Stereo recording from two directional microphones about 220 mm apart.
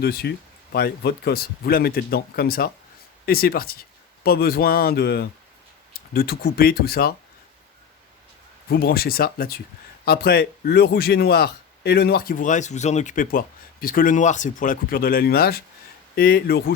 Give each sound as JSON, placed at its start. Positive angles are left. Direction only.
{"t": 0.0, "sound": "a man's voice", "side_deg": 45}
{"t": 8.7, "sound": "a man's voice", "side_deg": 45}